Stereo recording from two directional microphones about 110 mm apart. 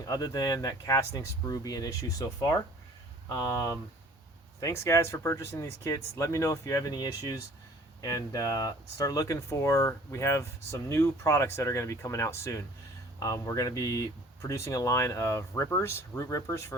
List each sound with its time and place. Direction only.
0.0 s speech: 35° left (ahead or behind)